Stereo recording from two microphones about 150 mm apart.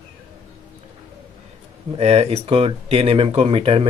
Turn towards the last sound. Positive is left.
turn(degrees=-40)  # may be behind; listen again after turning